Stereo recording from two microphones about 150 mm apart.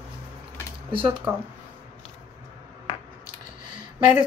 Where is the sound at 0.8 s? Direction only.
35° right (ahead or behind).